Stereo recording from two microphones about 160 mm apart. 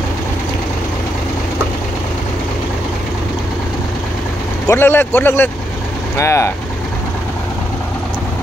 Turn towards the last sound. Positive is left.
turn(degrees=20)  # may be behind; listen again after turning